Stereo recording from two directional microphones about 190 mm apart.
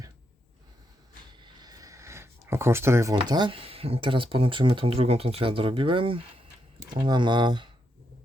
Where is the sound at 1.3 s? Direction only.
25° right (ahead or behind).